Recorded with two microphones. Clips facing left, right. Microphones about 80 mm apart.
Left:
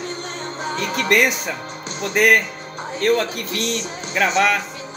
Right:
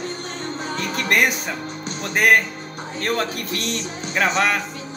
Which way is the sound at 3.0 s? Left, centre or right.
Right.